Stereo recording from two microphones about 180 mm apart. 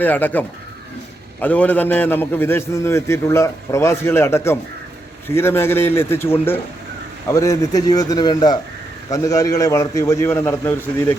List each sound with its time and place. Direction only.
0.0 s a man's voice: 10° left (ahead or behind)
7.3 s a man's voice: 15° left (ahead or behind)